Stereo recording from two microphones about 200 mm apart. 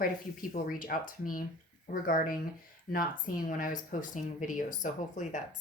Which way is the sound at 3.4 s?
40° left (ahead or behind).